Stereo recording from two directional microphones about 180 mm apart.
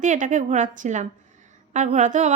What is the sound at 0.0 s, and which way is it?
A woman's voice, 45° right (ahead or behind).